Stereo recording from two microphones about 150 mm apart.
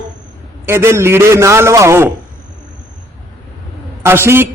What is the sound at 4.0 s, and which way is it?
Speech, 15° right (ahead or behind).